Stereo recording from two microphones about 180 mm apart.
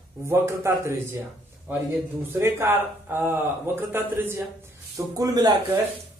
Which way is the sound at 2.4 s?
15° right (ahead or behind).